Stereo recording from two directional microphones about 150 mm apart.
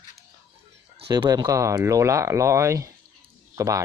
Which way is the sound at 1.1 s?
25° right (ahead or behind).